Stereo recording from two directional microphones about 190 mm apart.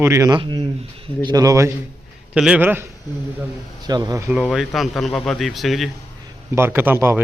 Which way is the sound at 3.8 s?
20° right (ahead or behind).